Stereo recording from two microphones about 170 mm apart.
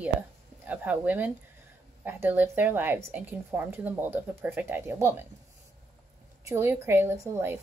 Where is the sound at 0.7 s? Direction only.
10° right (ahead or behind).